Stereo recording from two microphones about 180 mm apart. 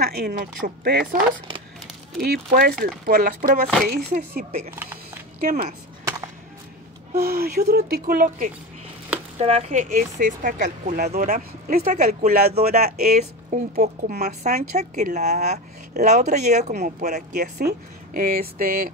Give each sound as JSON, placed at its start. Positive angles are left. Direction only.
{"t": 0.0, "sound": "speech", "side_deg": -60}
{"t": 2.1, "sound": "speech", "side_deg": -60}
{"t": 6.0, "sound": "music", "side_deg": -15}
{"t": 7.2, "sound": "speech", "side_deg": -55}
{"t": 9.4, "sound": "speech", "side_deg": -35}
{"t": 13.1, "sound": "speech", "side_deg": -40}